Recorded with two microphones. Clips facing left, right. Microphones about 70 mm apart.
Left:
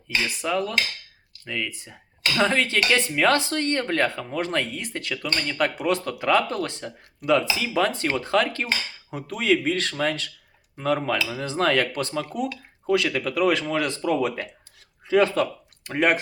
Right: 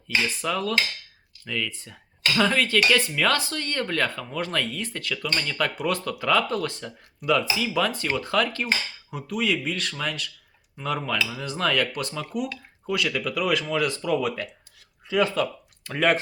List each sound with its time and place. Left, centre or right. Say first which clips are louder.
0.4 s speech: left 1 dB; left
15.8 s speech: left 1 dB; left